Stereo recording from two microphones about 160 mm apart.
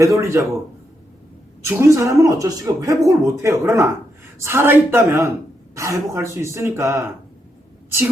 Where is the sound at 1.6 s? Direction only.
15° right (ahead or behind).